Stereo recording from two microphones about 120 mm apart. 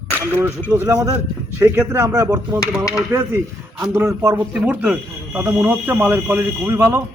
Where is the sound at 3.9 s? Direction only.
20° right (ahead or behind).